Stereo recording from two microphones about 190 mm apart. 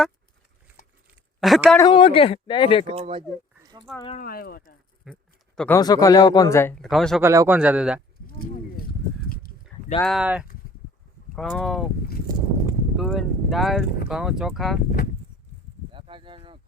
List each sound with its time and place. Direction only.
1.4 s a woman's voice: centre (ahead or behind)
1.9 s speech: 25° left (ahead or behind)
2.8 s speech: 30° right (ahead or behind)
3.6 s a sound: 20° right (ahead or behind)
4.2 s speech: 50° left (ahead or behind)
5.1 s speech: centre (ahead or behind)
5.8 s speech: 20° left (ahead or behind)
6.8 s speech: centre (ahead or behind)
7.2 s a man's voice: 15° right (ahead or behind)
10.0 s speech: centre (ahead or behind)
13.0 s speech: centre (ahead or behind)
14.8 s speech: 50° left (ahead or behind)
15.9 s a sound: 25° right (ahead or behind)